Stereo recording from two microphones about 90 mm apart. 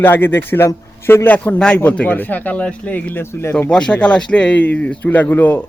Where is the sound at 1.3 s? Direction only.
15° left (ahead or behind).